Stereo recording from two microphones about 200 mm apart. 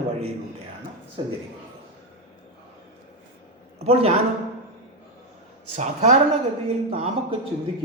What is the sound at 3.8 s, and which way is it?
Speech, 30° right (ahead or behind).